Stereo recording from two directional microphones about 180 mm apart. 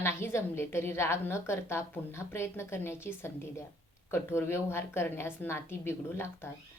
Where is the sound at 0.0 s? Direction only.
15° left (ahead or behind).